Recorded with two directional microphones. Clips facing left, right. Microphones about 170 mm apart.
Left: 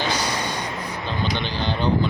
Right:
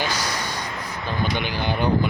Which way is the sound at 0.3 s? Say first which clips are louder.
Left 2 dB; 10° right (ahead or behind).